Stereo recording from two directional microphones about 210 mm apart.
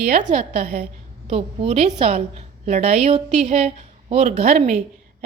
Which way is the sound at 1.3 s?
30° right (ahead or behind).